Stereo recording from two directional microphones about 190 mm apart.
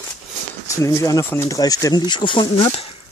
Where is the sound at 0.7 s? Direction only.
15° left (ahead or behind).